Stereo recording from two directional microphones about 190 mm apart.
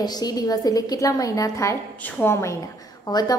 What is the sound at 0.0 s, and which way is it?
A woman's voice, 20° left (ahead or behind).